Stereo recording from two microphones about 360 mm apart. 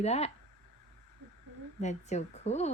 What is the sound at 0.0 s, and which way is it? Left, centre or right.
Speech, centre.